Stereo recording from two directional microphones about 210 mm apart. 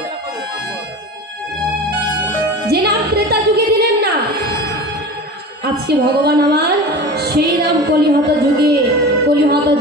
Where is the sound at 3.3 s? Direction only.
50° right (ahead or behind).